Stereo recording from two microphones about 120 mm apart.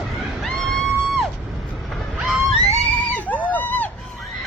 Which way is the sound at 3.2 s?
15° left (ahead or behind).